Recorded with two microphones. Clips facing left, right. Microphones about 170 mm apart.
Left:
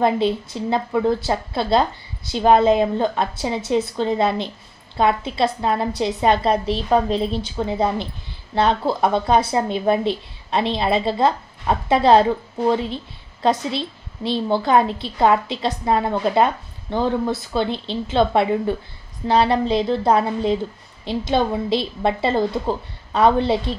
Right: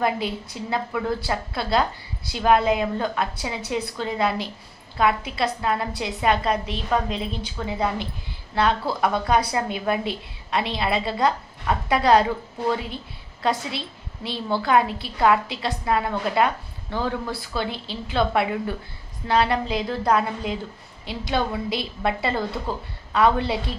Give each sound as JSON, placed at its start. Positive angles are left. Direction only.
{"t": 0.0, "sound": "a woman's voice", "side_deg": 25}
{"t": 7.7, "sound": "a woman's voice", "side_deg": 25}